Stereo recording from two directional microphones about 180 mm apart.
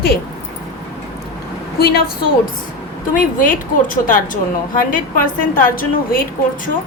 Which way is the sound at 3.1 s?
45° left (ahead or behind).